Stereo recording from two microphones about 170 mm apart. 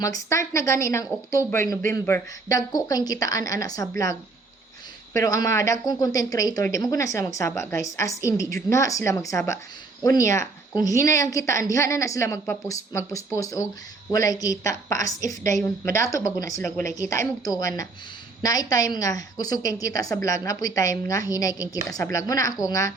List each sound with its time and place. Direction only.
0.0 s a woman's voice: 20° left (ahead or behind)